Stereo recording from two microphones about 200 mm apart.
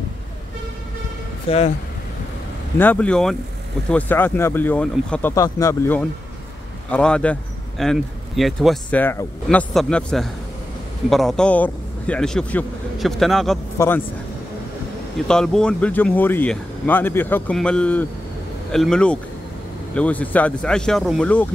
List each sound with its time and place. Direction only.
1.5 s speech: 30° left (ahead or behind)
2.8 s speech: 5° left (ahead or behind)
15.1 s speech: 5° left (ahead or behind)